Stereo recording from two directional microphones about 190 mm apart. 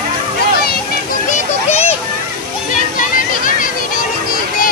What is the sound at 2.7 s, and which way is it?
Music, 45° left (ahead or behind).